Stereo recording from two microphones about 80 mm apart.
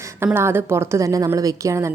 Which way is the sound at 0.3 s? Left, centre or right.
Right.